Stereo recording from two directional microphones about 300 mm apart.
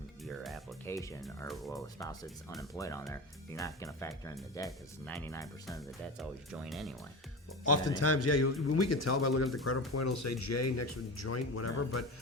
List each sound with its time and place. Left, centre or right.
0.3 s speech: centre
1.7 s speech: centre
6.1 s speech: centre
7.9 s a man's voice: left